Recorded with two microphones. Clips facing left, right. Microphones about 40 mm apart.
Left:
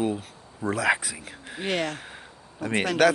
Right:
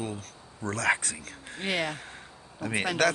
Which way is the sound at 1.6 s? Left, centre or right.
Centre.